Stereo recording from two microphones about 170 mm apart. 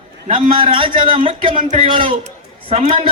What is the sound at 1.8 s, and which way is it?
Speech, 30° right (ahead or behind).